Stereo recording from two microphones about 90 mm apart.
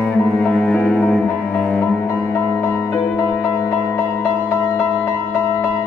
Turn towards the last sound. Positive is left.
turn(degrees=25)  # may be behind; listen again after turning